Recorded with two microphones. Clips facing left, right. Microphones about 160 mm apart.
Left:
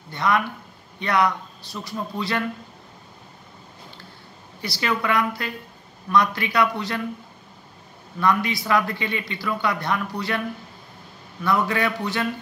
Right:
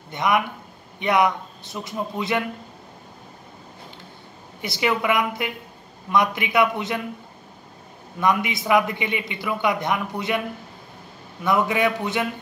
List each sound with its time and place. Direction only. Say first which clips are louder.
0.1 s a man's voice: right 1 dB; 20° right (ahead or behind)
4.6 s a man's voice: right 2 dB; 20° right (ahead or behind)
8.2 s a man's voice: even; 20° right (ahead or behind)
11.4 s a man's voice: right 2 dB; 20° right (ahead or behind)